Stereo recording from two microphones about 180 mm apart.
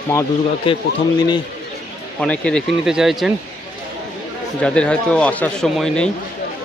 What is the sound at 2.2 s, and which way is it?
Speech, 5° left (ahead or behind).